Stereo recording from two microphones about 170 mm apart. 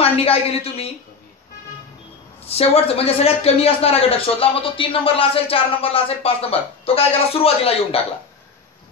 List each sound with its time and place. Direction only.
0.0 s a man's voice: 35° left (ahead or behind)
2.4 s a man's voice: 35° left (ahead or behind)